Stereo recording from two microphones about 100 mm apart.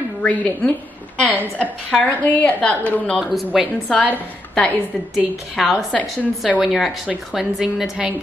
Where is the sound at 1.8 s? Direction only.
15° left (ahead or behind).